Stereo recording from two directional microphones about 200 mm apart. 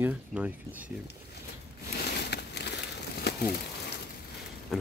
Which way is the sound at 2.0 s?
55° left (ahead or behind).